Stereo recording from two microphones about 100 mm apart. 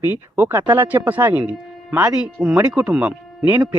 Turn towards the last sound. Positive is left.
turn(degrees=-10)  # may be behind; listen again after turning